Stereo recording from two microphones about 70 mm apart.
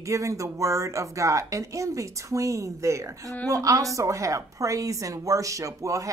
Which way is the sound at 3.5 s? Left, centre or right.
Right.